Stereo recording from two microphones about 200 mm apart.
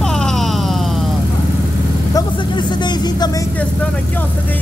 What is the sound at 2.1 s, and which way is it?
Speech, 20° left (ahead or behind).